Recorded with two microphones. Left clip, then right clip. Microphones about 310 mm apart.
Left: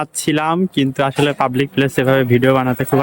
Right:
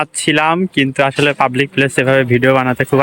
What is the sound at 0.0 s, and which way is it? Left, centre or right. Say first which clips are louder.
Speech: right 4 dB; centre.